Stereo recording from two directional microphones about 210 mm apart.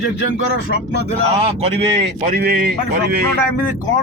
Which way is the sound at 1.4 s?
30° right (ahead or behind).